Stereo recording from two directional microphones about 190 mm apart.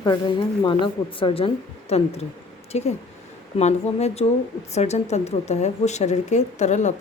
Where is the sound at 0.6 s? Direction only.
25° left (ahead or behind).